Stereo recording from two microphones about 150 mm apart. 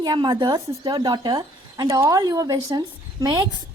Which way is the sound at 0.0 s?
30° right (ahead or behind).